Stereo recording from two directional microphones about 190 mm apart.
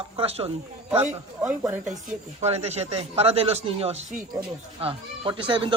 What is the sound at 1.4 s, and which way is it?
Speech, 5° right (ahead or behind).